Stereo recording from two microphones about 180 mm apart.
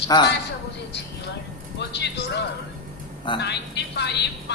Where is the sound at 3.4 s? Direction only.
75° left (ahead or behind).